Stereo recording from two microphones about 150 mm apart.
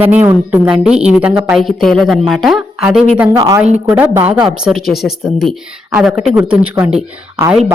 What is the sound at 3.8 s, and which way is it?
Speech, 10° right (ahead or behind).